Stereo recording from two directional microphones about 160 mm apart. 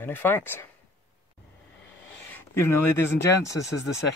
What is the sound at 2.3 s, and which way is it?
Speech, 15° left (ahead or behind).